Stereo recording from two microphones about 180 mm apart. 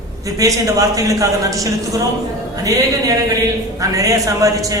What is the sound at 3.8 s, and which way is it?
A man's voice, 20° right (ahead or behind).